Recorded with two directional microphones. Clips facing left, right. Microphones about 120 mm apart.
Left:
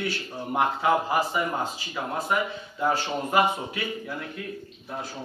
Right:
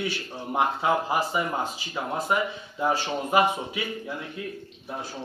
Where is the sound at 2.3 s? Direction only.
15° right (ahead or behind).